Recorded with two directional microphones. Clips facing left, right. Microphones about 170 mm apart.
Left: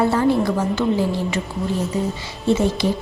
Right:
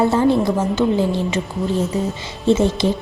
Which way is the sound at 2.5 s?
25° right (ahead or behind).